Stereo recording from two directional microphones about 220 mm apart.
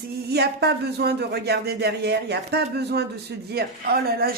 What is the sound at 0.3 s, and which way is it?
Speech, 50° right (ahead or behind).